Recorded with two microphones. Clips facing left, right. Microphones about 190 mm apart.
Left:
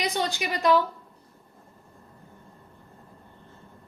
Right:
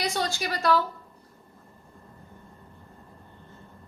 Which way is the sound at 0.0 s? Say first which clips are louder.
Left 1 dB; 20° left (ahead or behind).